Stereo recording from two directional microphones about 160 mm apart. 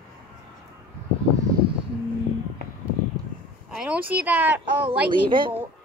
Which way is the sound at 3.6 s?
5° right (ahead or behind).